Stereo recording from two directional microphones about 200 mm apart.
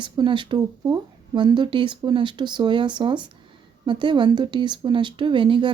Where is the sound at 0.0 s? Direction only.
25° right (ahead or behind).